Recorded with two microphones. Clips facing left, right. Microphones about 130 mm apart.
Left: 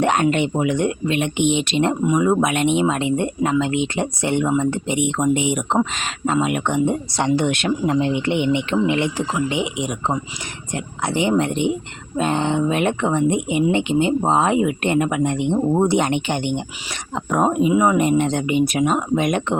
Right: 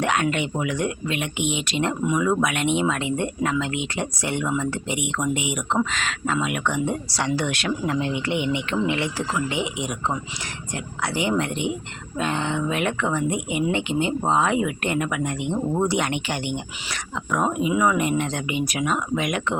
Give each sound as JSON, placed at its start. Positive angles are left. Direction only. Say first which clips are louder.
{"t": 0.0, "sound": "speech", "louder": "left 5 dB", "side_deg": 30}
{"t": 17.3, "sound": "speech", "louder": "left 5 dB", "side_deg": 35}